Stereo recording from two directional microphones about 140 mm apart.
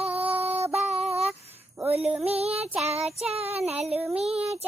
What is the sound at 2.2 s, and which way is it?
Child singing, 45° right (ahead or behind).